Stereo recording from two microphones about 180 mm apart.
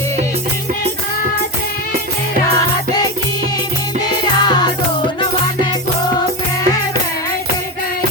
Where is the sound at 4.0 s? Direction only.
25° left (ahead or behind).